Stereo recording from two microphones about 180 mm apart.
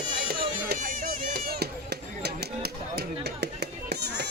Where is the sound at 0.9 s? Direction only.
50° right (ahead or behind).